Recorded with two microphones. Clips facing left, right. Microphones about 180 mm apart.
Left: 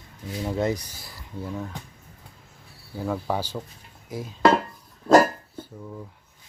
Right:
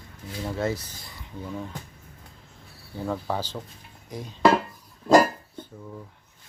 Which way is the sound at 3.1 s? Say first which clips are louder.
Left 2 dB; 10° left (ahead or behind).